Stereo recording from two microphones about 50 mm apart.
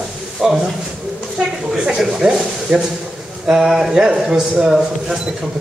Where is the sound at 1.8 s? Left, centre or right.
Centre.